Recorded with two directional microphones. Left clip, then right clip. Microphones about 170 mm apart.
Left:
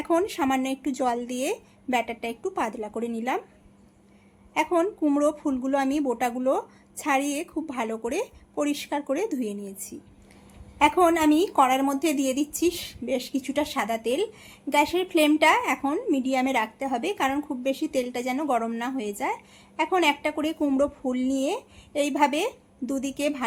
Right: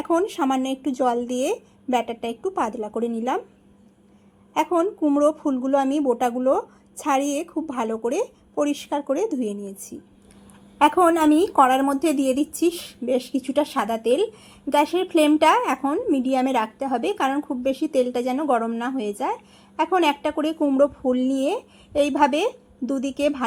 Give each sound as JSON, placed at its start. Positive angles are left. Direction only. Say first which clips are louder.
{"t": 0.0, "sound": "a woman's voice", "louder": "right 2 dB", "side_deg": -5}
{"t": 4.5, "sound": "a woman's voice", "louder": "right 3 dB", "side_deg": -5}
{"t": 10.8, "sound": "a woman's voice", "louder": "right 3 dB", "side_deg": -20}